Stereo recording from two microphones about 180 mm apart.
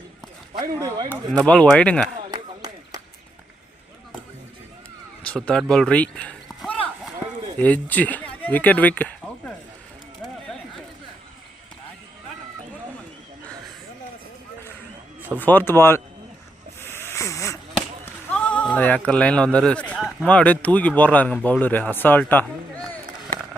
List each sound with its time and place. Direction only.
0.6 s speech: 20° right (ahead or behind)
1.3 s speech: 5° left (ahead or behind)
2.3 s a sound: 20° right (ahead or behind)
5.2 s a sound: 5° left (ahead or behind)
7.6 s speech: 10° left (ahead or behind)
15.4 s speech: 10° left (ahead or behind)
16.8 s snake: 15° left (ahead or behind)
18.0 s run: 10° left (ahead or behind)
20.2 s speech: 5° left (ahead or behind)
22.4 s a sound: 5° left (ahead or behind)